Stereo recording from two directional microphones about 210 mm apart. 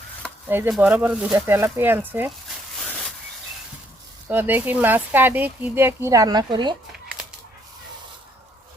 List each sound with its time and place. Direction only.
0.2 s speech: 10° right (ahead or behind)
4.3 s speech: 10° right (ahead or behind)